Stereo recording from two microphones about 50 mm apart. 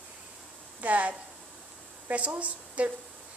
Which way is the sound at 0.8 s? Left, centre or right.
Right.